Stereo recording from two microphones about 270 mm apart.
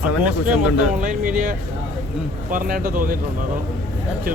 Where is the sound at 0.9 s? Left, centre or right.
Right.